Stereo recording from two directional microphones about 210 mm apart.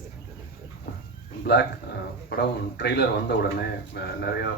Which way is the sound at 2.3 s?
50° left (ahead or behind).